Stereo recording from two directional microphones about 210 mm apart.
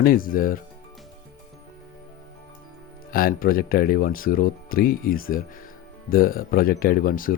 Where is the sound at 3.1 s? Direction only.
45° left (ahead or behind).